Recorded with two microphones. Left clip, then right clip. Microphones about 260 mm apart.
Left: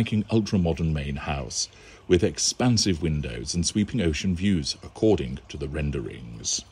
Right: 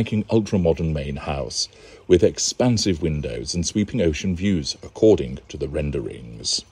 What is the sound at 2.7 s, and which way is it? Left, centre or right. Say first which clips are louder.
Speech: right 3 dB; right.